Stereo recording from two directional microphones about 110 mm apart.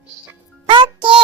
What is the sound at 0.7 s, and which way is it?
Music, 45° right (ahead or behind).